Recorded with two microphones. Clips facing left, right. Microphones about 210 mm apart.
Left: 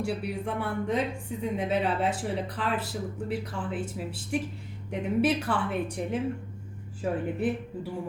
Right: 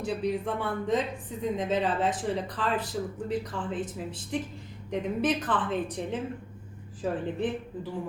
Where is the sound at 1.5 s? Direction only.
10° left (ahead or behind).